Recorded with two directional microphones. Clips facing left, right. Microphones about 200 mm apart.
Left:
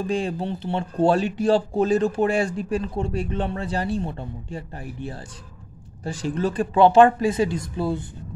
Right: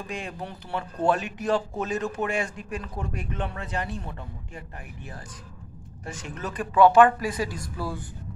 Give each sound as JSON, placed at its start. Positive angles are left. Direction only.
{"t": 0.0, "sound": "speech", "side_deg": 30}